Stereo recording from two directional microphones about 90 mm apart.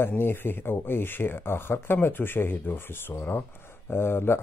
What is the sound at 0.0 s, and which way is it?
Speech, 25° left (ahead or behind).